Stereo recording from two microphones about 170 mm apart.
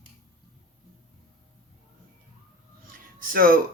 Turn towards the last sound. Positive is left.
turn(degrees=-60)  # may be behind; listen again after turning